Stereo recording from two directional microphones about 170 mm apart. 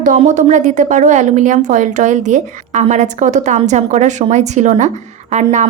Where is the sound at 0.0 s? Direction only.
50° right (ahead or behind).